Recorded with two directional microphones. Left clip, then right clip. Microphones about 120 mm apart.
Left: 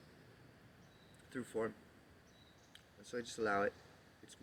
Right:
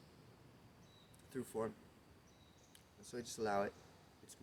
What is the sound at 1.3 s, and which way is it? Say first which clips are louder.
Speech: even; 45° right (ahead or behind).